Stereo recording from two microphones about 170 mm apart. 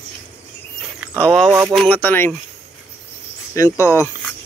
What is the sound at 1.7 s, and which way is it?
Speech, 5° left (ahead or behind).